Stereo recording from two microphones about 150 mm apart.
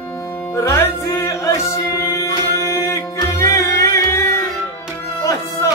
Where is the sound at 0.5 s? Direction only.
20° left (ahead or behind).